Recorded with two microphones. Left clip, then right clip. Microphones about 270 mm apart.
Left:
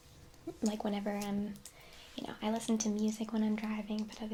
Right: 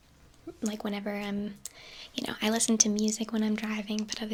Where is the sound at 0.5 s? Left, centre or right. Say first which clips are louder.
Right 2 dB; centre.